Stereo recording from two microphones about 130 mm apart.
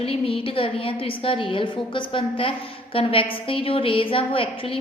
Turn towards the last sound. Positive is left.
turn(degrees=45)  # may be behind; listen again after turning